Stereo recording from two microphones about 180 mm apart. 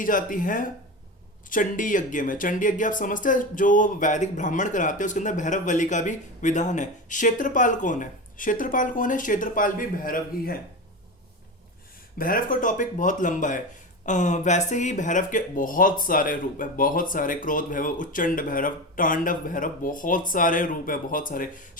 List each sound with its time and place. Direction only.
0.0 s speech: 50° left (ahead or behind)
12.1 s speech: 50° left (ahead or behind)